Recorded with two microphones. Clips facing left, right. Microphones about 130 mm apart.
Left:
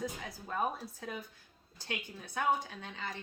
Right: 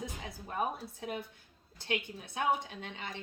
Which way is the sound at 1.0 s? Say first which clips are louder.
Right 6 dB; 25° right (ahead or behind).